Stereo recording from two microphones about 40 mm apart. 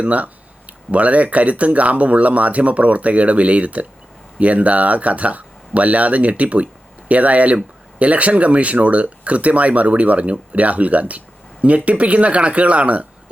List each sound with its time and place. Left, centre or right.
0.0 s speech: right